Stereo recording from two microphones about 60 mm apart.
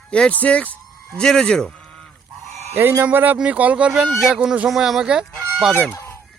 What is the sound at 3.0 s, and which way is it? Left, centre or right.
Speech, right.